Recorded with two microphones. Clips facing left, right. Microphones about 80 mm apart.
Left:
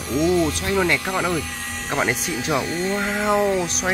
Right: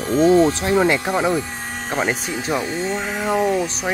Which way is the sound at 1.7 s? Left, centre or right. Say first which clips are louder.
Right 1 dB; right.